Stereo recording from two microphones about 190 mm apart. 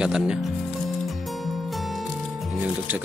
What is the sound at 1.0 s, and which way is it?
Music, centre (ahead or behind).